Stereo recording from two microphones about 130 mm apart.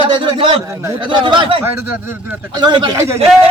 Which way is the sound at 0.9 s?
40° right (ahead or behind).